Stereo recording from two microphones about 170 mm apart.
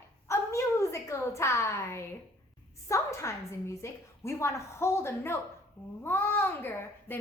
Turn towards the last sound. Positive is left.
turn(degrees=15)  # may be behind; listen again after turning